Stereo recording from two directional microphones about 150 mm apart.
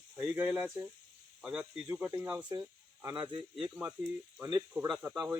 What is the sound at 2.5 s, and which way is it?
Speech, 20° right (ahead or behind).